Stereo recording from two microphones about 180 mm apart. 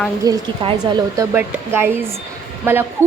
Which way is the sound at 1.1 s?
10° right (ahead or behind).